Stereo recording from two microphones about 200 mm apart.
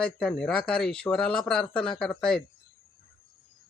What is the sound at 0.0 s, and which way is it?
Speech, 5° left (ahead or behind).